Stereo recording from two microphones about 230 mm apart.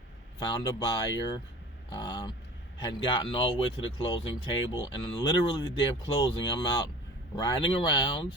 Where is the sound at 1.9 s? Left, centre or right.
Centre.